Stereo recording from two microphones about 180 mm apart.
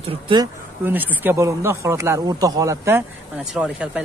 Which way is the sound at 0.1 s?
25° right (ahead or behind).